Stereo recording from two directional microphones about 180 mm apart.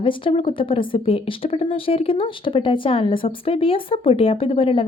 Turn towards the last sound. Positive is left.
turn(degrees=30)  # may be behind; listen again after turning